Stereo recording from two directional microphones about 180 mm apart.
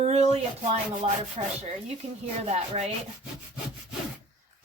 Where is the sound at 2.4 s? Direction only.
35° right (ahead or behind).